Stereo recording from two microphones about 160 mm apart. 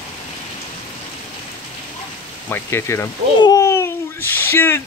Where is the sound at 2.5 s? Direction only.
15° left (ahead or behind).